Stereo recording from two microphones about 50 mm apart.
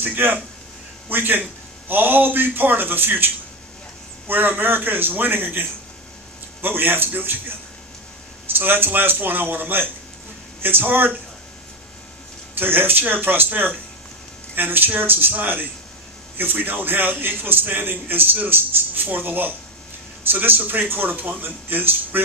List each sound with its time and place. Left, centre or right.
0.0 s a man's voice: right
4.3 s a man's voice: right
8.5 s a man's voice: right
12.5 s a man's voice: right